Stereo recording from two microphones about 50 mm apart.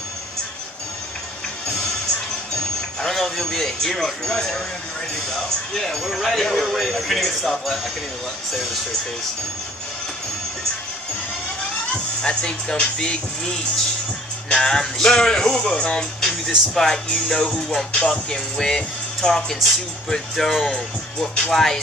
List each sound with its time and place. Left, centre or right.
2.5 s music: centre
5.3 s a man's voice: centre
11.9 s speech: centre
14.5 s speech: centre
15.8 s speech: left
16.2 s speech: centre